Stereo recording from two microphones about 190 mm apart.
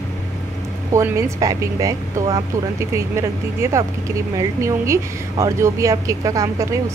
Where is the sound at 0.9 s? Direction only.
15° right (ahead or behind).